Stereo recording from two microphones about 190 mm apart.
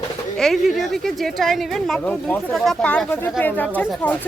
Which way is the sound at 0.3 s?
Centre (ahead or behind).